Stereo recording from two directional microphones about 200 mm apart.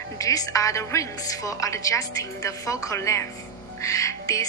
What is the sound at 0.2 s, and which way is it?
A woman's voice, 15° left (ahead or behind).